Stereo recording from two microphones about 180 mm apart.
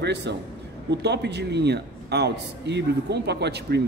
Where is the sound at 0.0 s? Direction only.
70° right (ahead or behind).